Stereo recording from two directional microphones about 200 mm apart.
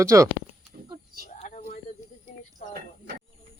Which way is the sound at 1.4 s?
35° left (ahead or behind).